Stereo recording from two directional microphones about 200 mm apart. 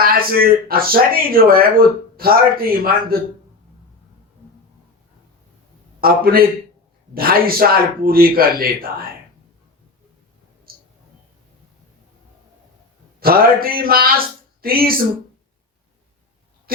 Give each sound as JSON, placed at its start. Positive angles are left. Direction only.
{"t": 0.0, "sound": "speech", "side_deg": -45}
{"t": 6.0, "sound": "a man's voice", "side_deg": -50}
{"t": 10.7, "sound": "a sound", "side_deg": -50}
{"t": 13.1, "sound": "speech", "side_deg": -50}
{"t": 16.7, "sound": "speech", "side_deg": -45}